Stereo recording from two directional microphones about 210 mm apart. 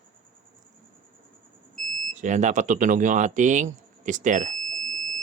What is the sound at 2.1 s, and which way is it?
Speech, 35° right (ahead or behind).